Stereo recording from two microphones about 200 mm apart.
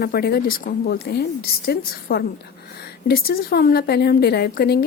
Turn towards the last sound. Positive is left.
turn(degrees=50)  # may be behind; listen again after turning